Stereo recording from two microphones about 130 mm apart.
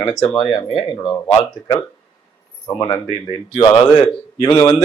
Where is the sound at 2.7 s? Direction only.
25° left (ahead or behind).